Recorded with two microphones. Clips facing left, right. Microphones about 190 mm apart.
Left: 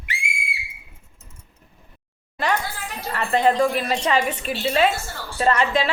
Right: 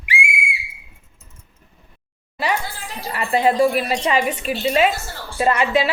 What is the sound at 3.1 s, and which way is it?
A woman's voice, 10° right (ahead or behind).